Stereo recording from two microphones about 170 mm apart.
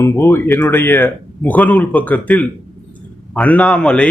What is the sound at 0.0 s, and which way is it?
A man's voice, 15° left (ahead or behind).